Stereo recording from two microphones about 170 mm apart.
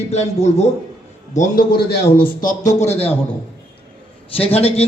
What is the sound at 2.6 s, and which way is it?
Speech, 40° left (ahead or behind).